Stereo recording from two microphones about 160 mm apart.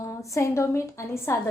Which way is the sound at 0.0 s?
20° left (ahead or behind).